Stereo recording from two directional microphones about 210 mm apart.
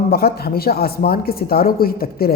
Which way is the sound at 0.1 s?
45° left (ahead or behind).